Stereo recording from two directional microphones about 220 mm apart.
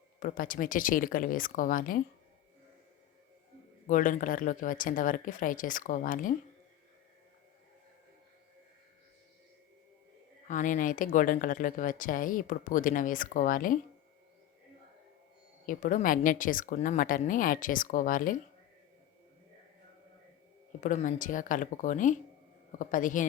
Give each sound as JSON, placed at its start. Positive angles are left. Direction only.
{"t": 0.2, "sound": "speech", "side_deg": 40}
{"t": 3.8, "sound": "speech", "side_deg": 35}
{"t": 10.5, "sound": "speech", "side_deg": 35}
{"t": 15.6, "sound": "speech", "side_deg": 35}
{"t": 20.8, "sound": "speech", "side_deg": 35}